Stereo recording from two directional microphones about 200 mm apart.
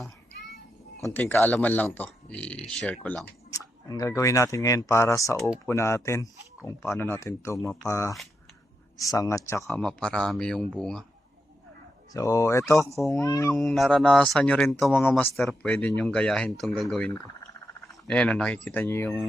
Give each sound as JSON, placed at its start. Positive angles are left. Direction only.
{"t": 1.0, "sound": "speech", "side_deg": 10}
{"t": 3.5, "sound": "speech", "side_deg": 15}
{"t": 7.6, "sound": "speech", "side_deg": 0}
{"t": 7.9, "sound": "speech", "side_deg": 15}
{"t": 9.6, "sound": "speech", "side_deg": 5}
{"t": 12.1, "sound": "speech", "side_deg": 15}
{"t": 13.5, "sound": "speech", "side_deg": 0}